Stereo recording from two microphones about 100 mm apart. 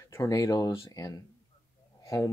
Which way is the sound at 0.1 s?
35° left (ahead or behind).